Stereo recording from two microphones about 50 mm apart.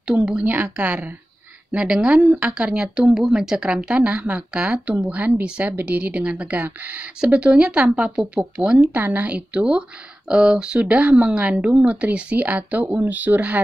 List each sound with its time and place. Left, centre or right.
0.0 s a woman's voice: centre
1.7 s speech: right
8.9 s speech: right